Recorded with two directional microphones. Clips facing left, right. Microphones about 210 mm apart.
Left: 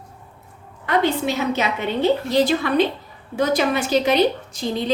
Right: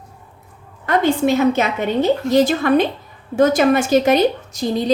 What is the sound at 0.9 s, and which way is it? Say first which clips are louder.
A woman's voice: right 4 dB; 50° right (ahead or behind).